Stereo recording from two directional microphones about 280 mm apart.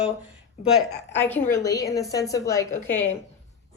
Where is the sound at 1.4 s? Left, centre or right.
Centre.